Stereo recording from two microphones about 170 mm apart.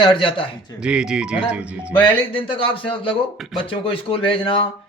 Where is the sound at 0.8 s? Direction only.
5° right (ahead or behind).